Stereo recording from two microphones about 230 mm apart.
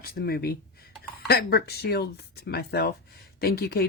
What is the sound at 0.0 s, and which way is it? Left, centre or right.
Speech, left.